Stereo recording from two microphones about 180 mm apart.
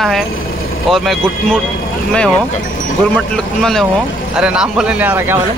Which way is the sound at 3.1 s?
Centre (ahead or behind).